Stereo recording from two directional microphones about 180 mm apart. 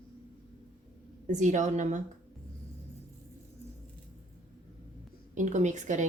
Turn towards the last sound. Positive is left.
turn(degrees=-40)  # may be behind; listen again after turning